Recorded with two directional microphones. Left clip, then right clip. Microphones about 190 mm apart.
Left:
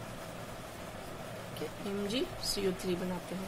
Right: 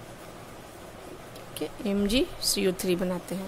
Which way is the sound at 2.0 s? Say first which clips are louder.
Right 9 dB; 55° right (ahead or behind).